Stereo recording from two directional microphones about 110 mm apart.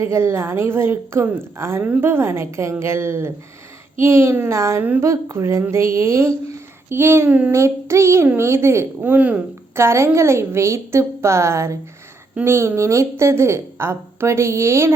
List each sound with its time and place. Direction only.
0.0 s a woman's voice: 25° right (ahead or behind)
7.5 s a woman's voice: 25° right (ahead or behind)
9.7 s a woman's voice: 25° right (ahead or behind)